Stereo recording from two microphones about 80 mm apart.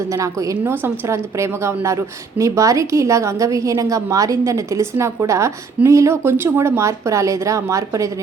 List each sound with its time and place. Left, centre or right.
0.1 s a woman's voice: right
0.6 s a woman's voice: right